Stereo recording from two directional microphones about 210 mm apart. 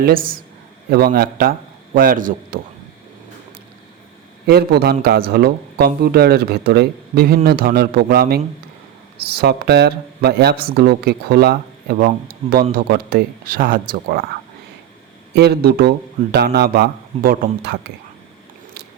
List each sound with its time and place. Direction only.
0.0 s a man's voice: 45° right (ahead or behind)
4.4 s speech: 50° right (ahead or behind)
15.4 s speech: 50° right (ahead or behind)